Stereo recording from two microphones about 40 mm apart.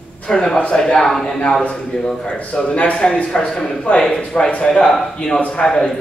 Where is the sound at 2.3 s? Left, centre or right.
Left.